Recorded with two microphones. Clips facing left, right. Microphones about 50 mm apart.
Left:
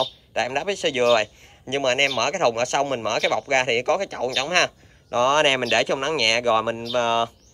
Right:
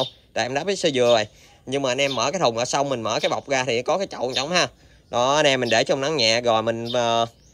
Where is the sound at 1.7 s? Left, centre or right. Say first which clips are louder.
Left 1 dB; left.